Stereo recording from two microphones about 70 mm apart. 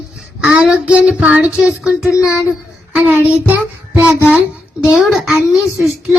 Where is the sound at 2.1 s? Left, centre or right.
Left.